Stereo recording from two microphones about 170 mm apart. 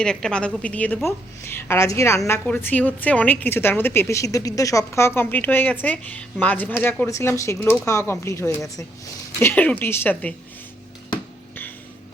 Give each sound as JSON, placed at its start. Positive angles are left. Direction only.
{"t": 0.0, "sound": "a woman's voice", "side_deg": 5}